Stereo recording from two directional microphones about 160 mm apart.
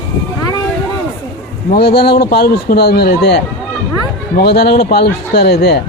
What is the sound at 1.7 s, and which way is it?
A man's voice, 85° left.